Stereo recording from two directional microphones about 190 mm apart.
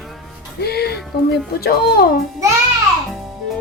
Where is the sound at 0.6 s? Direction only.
55° left (ahead or behind).